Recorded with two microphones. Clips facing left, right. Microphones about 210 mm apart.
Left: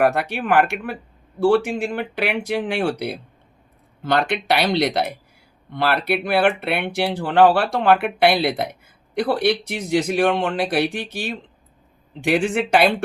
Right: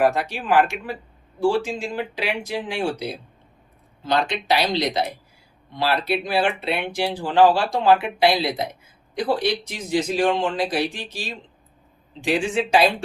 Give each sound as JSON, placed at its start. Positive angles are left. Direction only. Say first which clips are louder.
{"t": 0.0, "sound": "speech", "louder": "left 2 dB", "side_deg": 60}